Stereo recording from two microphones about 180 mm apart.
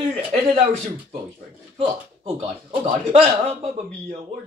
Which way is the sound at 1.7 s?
35° right (ahead or behind).